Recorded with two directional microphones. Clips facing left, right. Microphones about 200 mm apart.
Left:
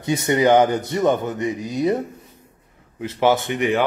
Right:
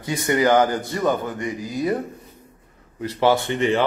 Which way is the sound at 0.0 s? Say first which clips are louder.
Left 2 dB; 25° left (ahead or behind).